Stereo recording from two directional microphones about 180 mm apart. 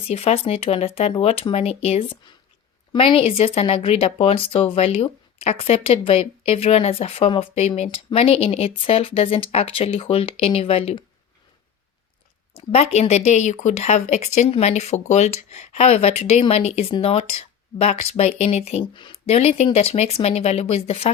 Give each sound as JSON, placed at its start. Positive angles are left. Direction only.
{"t": 0.1, "sound": "speech", "side_deg": 35}
{"t": 12.5, "sound": "speech", "side_deg": 35}